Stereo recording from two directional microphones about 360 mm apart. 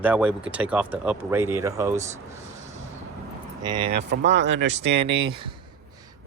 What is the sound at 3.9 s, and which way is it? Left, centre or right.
Speech, right.